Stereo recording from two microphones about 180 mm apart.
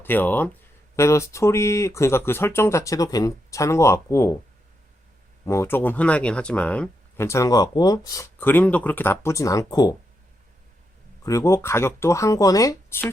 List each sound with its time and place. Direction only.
0.0 s speech: 10° left (ahead or behind)
5.5 s speech: 15° left (ahead or behind)
11.2 s speech: 20° left (ahead or behind)